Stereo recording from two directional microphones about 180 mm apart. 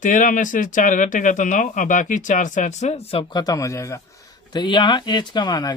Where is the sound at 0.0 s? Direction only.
45° left (ahead or behind).